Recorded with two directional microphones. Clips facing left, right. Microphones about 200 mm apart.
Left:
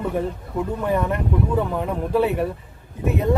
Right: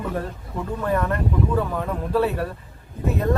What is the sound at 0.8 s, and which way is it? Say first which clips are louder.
Speech: right 1 dB; 15° left (ahead or behind).